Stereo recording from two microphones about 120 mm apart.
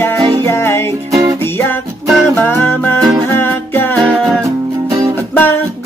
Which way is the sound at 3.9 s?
5° left (ahead or behind).